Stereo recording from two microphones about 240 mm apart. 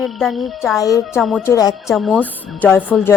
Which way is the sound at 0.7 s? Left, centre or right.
Centre.